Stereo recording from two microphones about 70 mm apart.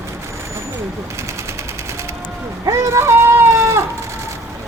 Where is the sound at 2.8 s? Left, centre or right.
Right.